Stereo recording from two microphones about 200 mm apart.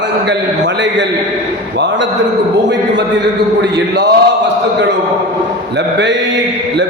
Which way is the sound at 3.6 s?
55° right (ahead or behind).